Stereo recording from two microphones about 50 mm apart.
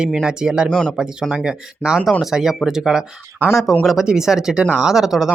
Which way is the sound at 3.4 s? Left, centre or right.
Right.